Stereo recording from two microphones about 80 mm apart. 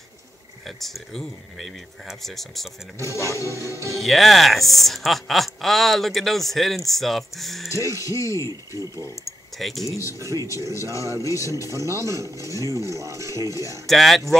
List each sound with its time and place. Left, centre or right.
0.7 s speech: centre
3.0 s speech: left
3.9 s speech: centre
8.0 s speech: left
9.6 s speech: centre
9.8 s speech: left
11.9 s speech: right
12.4 s speech: left
13.0 s speech: right
13.8 s speech: centre